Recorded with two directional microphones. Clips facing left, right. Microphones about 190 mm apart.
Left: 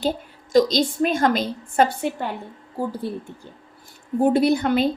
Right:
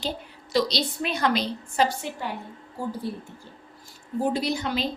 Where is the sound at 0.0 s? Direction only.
45° left (ahead or behind).